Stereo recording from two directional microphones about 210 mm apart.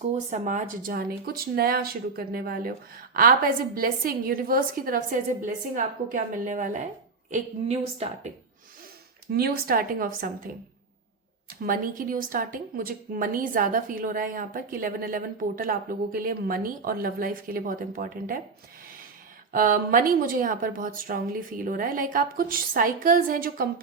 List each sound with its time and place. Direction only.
0.1 s a woman's voice: 35° right (ahead or behind)
9.3 s speech: 45° right (ahead or behind)
11.6 s a woman's voice: 40° right (ahead or behind)
19.5 s a woman's voice: 40° right (ahead or behind)